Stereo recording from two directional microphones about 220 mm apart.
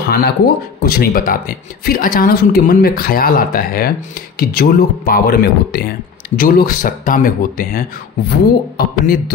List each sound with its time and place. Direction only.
0.0 s speech: 40° left (ahead or behind)